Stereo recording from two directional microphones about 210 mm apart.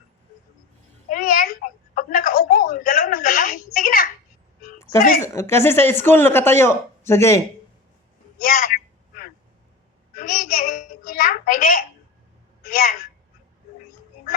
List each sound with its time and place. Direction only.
1.1 s a sound: 40° left (ahead or behind)
5.2 s speech: 15° left (ahead or behind)
8.4 s a woman's voice: 40° left (ahead or behind)
10.2 s a child's voice: 45° left (ahead or behind)